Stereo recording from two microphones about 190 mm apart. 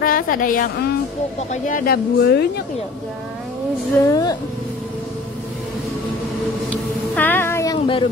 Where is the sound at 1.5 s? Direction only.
45° left (ahead or behind).